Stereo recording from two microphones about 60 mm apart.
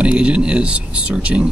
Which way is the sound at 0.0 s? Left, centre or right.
Centre.